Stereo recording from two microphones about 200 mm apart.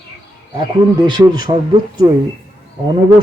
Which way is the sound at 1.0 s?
20° right (ahead or behind).